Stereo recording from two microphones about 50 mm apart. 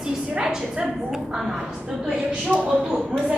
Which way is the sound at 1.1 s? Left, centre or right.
Centre.